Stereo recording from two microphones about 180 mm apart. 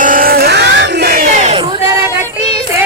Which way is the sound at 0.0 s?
50° right (ahead or behind).